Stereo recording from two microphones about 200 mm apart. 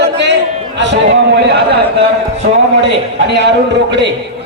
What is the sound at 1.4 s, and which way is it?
Speech, 55° right (ahead or behind).